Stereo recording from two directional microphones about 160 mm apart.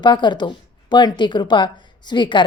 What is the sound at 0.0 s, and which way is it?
A woman's voice, 30° left (ahead or behind).